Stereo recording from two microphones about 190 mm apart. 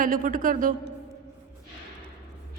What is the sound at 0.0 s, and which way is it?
Speech, 45° right (ahead or behind).